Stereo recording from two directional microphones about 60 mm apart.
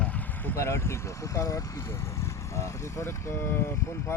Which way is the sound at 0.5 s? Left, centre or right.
Left.